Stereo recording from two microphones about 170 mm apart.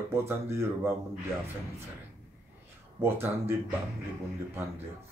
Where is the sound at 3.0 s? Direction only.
15° right (ahead or behind).